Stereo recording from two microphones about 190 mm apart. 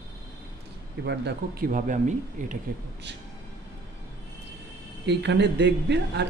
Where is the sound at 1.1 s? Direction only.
55° right (ahead or behind); by 2.5 s 40° right (ahead or behind).